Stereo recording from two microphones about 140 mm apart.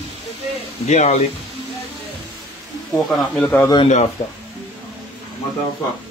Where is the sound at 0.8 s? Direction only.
55° left (ahead or behind).